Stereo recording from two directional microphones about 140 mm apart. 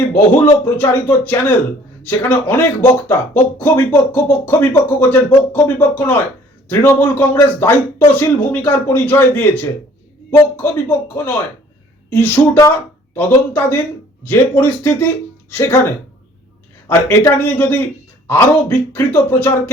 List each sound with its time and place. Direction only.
0.5 s speech: 20° left (ahead or behind)